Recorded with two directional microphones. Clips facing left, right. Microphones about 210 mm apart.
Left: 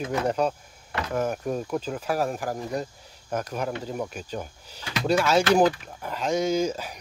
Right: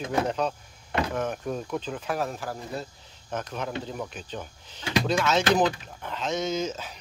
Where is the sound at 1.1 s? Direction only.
5° left (ahead or behind).